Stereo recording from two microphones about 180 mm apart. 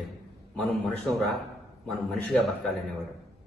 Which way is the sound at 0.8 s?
Centre (ahead or behind).